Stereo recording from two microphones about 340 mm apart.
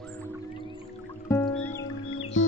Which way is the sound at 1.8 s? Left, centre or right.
Left.